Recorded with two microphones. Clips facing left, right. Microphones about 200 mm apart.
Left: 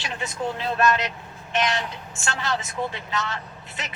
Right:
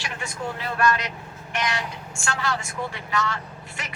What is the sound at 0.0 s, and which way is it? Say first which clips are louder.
Speech: left 3 dB; 20° left (ahead or behind).